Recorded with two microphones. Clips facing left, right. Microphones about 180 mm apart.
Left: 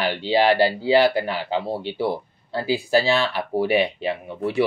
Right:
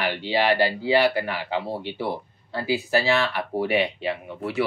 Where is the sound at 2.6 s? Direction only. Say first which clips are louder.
Left 3 dB; 35° left (ahead or behind).